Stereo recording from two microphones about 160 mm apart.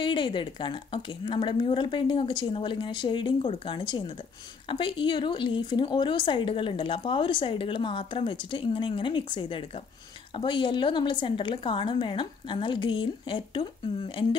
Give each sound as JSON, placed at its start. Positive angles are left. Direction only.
{"t": 0.0, "sound": "speech", "side_deg": 30}